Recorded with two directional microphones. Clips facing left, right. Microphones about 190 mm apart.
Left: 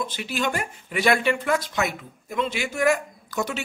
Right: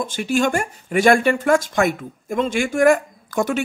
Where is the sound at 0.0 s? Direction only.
45° right (ahead or behind).